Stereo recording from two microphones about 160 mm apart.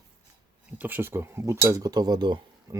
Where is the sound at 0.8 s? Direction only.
10° right (ahead or behind).